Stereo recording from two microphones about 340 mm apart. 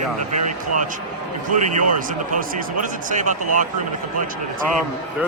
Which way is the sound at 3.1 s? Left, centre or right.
Right.